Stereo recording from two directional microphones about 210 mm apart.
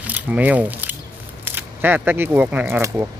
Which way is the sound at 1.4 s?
10° right (ahead or behind).